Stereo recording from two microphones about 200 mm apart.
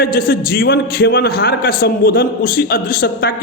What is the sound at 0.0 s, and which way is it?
Speech, 45° left (ahead or behind).